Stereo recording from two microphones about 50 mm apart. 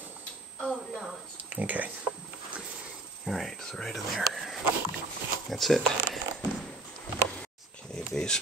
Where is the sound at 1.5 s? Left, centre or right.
Right.